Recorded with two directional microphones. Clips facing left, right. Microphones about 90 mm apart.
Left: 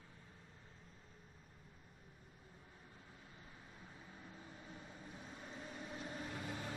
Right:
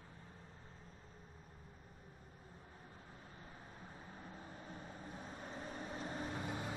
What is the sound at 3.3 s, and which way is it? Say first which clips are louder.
Vehicle: right 4 dB; 40° right (ahead or behind).